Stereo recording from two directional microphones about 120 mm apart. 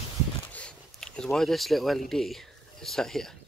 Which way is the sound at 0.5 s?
10° left (ahead or behind).